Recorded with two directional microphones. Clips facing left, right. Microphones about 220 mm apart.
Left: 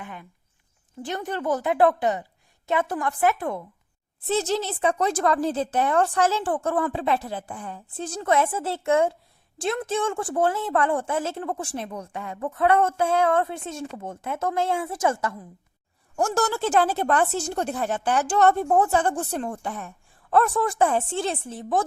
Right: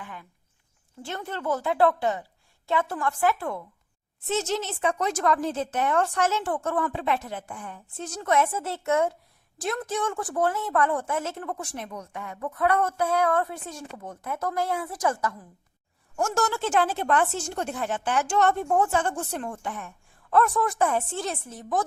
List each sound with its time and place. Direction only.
0.0 s a sound: 20° left (ahead or behind)
1.0 s a woman's voice: 15° left (ahead or behind)
4.3 s a woman's voice: 35° left (ahead or behind)